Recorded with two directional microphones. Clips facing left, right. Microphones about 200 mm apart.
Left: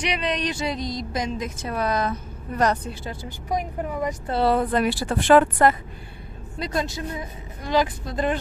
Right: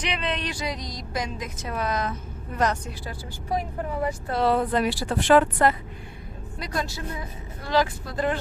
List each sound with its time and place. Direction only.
0.0 s a woman's voice: 15° left (ahead or behind); by 2.9 s 35° left (ahead or behind)
3.0 s speech: 20° left (ahead or behind)
4.3 s speech: 30° left (ahead or behind)
4.7 s speech: 50° left (ahead or behind)
6.6 s a woman's voice: 20° left (ahead or behind)